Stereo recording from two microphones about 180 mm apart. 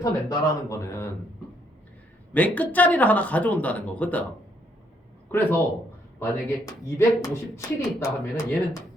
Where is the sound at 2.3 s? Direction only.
10° left (ahead or behind).